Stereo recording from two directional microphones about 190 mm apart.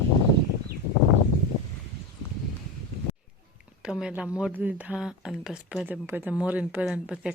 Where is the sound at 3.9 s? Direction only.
5° right (ahead or behind).